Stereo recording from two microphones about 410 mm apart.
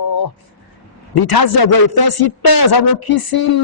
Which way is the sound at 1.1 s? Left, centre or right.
Left.